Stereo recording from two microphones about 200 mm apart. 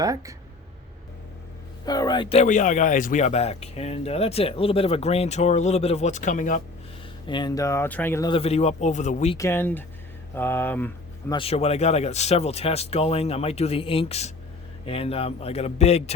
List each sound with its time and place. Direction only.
0.0 s speech: 15° right (ahead or behind)
1.8 s speech: 20° left (ahead or behind); by 6.6 s 40° left (ahead or behind)
7.3 s speech: 20° left (ahead or behind)
8.3 s speech: 30° left (ahead or behind)
9.4 s speech: 10° left (ahead or behind)
11.3 s speech: 30° left (ahead or behind)